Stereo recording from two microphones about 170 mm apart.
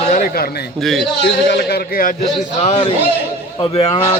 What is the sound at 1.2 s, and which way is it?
Speech, 85° left.